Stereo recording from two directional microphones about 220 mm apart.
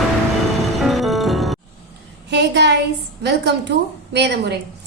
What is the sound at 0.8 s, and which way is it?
Music, centre (ahead or behind).